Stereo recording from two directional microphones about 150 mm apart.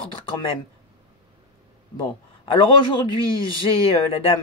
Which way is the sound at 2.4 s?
35° left (ahead or behind).